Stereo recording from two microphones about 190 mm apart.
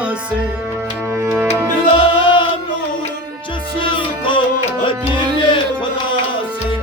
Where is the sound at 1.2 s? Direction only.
10° right (ahead or behind).